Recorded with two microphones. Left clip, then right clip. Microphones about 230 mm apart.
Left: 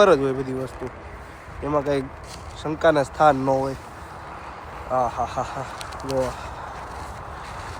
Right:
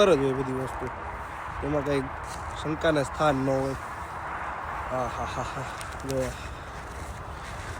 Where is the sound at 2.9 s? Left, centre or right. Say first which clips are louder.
Left 7 dB; centre.